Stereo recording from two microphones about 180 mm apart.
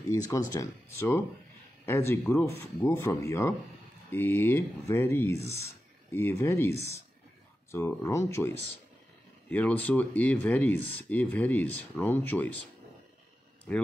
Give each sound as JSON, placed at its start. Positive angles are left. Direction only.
{"t": 0.1, "sound": "speech", "side_deg": 15}
{"t": 13.7, "sound": "speech", "side_deg": 10}